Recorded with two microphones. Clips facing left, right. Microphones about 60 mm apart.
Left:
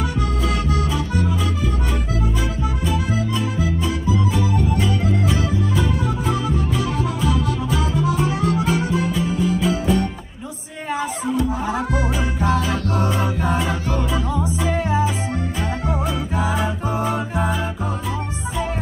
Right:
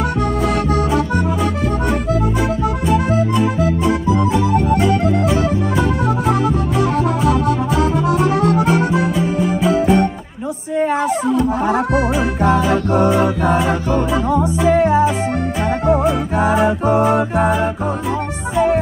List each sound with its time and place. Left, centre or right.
0.7 s accordion: right
2.9 s music: right
4.3 s music: right
6.2 s music: right
8.9 s music: right
9.2 s music: right
11.3 s music: right
12.5 s music: right